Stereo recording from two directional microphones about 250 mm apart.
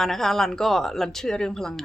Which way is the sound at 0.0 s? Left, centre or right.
Centre.